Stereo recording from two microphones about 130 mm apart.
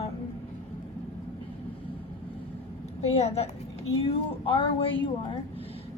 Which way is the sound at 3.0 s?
55° left (ahead or behind).